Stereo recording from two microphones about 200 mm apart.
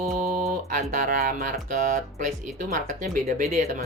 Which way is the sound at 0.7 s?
40° right (ahead or behind).